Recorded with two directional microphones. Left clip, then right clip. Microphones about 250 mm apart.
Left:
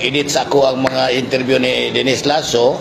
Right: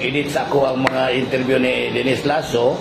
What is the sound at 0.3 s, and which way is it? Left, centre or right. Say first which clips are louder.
Speech: left 5 dB; left.